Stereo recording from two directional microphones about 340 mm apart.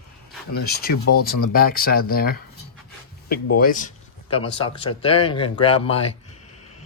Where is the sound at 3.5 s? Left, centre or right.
Left.